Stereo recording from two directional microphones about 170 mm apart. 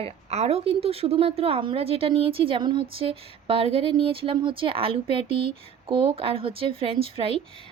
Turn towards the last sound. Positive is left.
turn(degrees=-35)  # may be behind; listen again after turning